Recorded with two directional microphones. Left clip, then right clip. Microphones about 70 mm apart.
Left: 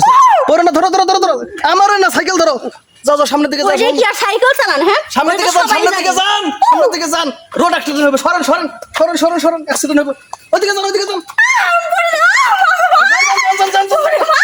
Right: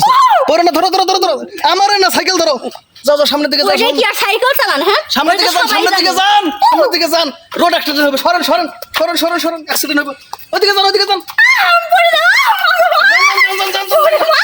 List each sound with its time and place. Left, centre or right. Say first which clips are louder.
0.0 s a sound: left 1 dB; left
0.4 s speech: even; left
1.3 s speech: even; centre
5.3 s speech: even; left
9.0 s speech: left 2 dB; centre
10.5 s speech: right 2 dB; left
12.8 s a sound: right 1 dB; left